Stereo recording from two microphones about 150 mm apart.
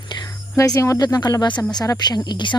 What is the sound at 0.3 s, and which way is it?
Speech, 20° left (ahead or behind).